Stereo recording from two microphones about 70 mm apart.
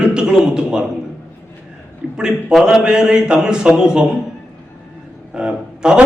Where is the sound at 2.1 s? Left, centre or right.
Centre.